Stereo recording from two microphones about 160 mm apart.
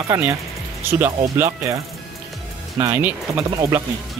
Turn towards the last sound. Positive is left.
turn(degrees=-15)  # may be behind; listen again after turning